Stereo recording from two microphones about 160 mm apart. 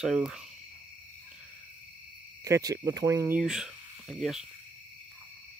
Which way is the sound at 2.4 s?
20° right (ahead or behind).